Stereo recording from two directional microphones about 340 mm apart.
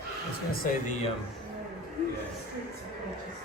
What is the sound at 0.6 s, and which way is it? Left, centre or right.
Speech, left.